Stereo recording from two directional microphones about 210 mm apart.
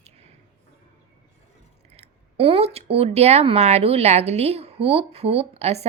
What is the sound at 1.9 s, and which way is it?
Speech, 30° right (ahead or behind).